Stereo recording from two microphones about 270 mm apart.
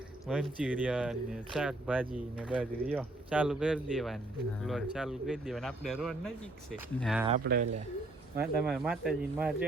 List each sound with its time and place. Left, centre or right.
0.3 s speech: centre
7.4 s speech: right
8.4 s speech: centre